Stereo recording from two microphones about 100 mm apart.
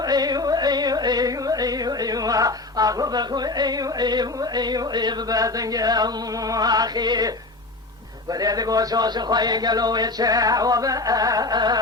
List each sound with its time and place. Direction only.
0.0 s music: 40° right (ahead or behind)
6.5 s speech: 40° right (ahead or behind)